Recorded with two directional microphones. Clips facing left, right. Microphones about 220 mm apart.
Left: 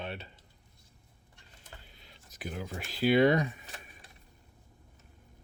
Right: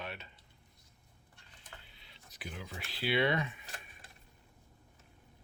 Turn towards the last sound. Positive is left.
turn(degrees=40)  # may be behind; listen again after turning